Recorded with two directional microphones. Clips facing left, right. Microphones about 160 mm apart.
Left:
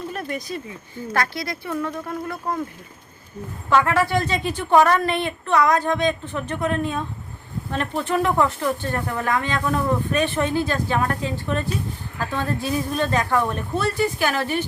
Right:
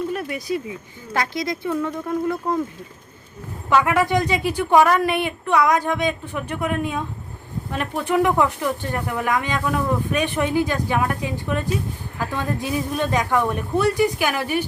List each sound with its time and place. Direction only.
0.1 s a sound: 10° right (ahead or behind)
1.1 s speech: 15° right (ahead or behind)
3.7 s speech: 15° right (ahead or behind)